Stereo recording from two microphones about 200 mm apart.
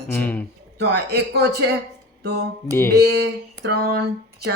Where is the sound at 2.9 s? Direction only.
55° right (ahead or behind).